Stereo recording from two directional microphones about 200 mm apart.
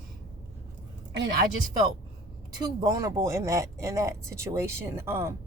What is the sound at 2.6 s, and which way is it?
Speech, 20° right (ahead or behind).